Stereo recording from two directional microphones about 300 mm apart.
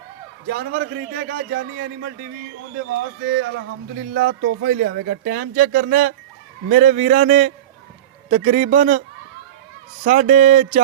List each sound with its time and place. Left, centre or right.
0.4 s a man's voice: right